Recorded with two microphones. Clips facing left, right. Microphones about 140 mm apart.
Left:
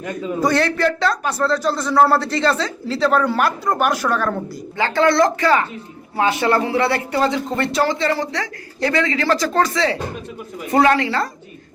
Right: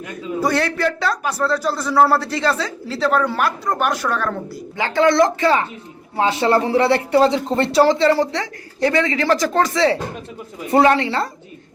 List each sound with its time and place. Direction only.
0.3 s speech: 5° right (ahead or behind)
4.8 s speech: 15° right (ahead or behind)